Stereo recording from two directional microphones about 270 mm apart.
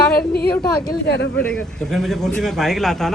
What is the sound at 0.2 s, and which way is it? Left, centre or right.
A woman's voice, left.